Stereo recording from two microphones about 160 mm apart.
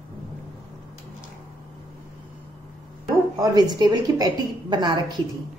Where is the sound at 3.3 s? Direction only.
25° right (ahead or behind).